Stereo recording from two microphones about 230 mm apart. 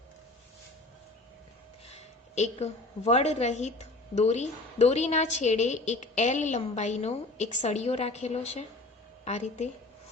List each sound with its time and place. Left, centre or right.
1.9 s a woman's voice: left